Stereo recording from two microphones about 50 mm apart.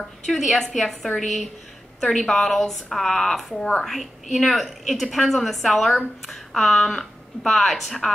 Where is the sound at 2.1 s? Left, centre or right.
Centre.